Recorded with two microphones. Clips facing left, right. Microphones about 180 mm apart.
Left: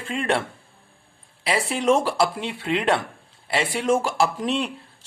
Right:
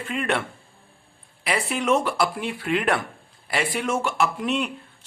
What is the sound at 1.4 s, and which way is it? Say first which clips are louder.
Speech: left 3 dB; 30° left (ahead or behind).